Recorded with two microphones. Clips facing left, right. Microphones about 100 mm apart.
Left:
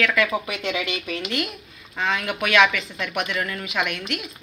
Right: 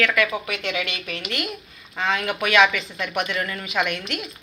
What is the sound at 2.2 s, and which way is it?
Speech, 10° right (ahead or behind).